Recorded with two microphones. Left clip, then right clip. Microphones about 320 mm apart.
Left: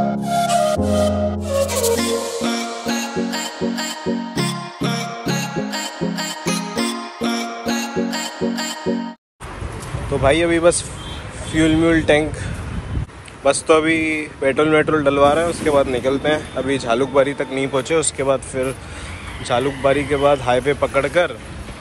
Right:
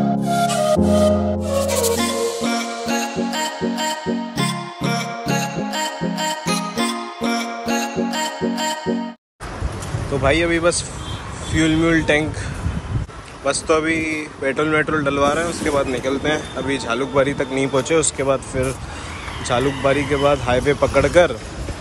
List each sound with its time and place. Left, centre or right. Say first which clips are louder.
0.2 s music: left 2 dB; centre
10.2 s speech: left 2 dB; centre
13.4 s speech: left 4 dB; centre